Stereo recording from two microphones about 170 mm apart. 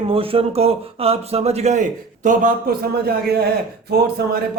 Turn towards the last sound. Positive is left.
turn(degrees=-70)  # may be behind; listen again after turning